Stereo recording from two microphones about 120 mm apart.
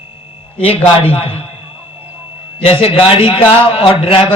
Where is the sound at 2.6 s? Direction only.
50° left (ahead or behind).